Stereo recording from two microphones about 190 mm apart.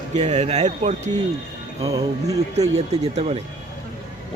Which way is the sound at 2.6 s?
35° right (ahead or behind).